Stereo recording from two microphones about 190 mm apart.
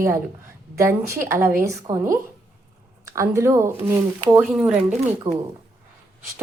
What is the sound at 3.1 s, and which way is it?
A woman's voice, 15° right (ahead or behind).